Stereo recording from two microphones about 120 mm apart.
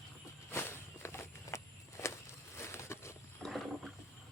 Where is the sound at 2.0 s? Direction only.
20° left (ahead or behind).